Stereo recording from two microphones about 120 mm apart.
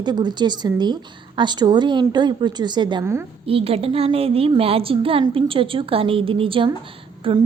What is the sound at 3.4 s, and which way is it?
A woman's voice, 55° right (ahead or behind).